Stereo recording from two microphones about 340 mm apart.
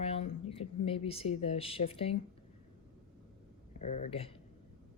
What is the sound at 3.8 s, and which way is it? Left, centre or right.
Speech, left.